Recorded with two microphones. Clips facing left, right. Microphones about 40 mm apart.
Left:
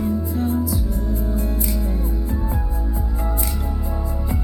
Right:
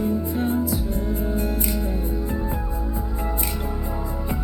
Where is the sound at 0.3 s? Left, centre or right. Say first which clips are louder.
Left 1 dB; right.